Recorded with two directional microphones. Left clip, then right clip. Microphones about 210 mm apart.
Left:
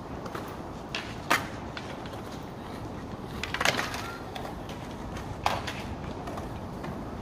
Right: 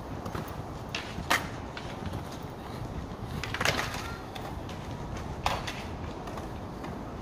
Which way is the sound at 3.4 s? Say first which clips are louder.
Left 2 dB; 45° left (ahead or behind).